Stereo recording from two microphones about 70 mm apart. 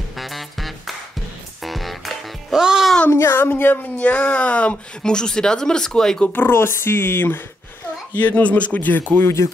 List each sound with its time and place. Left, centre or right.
0.1 s music: centre
2.6 s speech: centre
3.1 s speech: left; by 6.2 s centre
6.2 s speech: left
9.1 s speech: left